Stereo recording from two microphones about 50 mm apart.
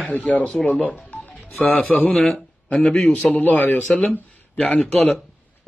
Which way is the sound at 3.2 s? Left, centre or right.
Left.